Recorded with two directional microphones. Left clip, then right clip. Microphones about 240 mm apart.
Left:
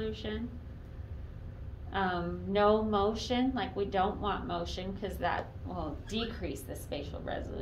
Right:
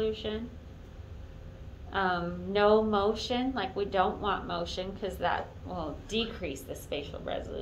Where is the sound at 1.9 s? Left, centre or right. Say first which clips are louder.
Right 3 dB; left.